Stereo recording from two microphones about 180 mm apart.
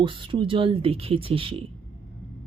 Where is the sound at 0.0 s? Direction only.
30° right (ahead or behind).